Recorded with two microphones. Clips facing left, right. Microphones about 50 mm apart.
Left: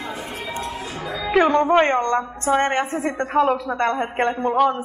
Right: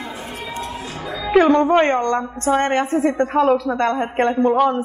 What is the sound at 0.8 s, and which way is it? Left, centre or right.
Music, centre.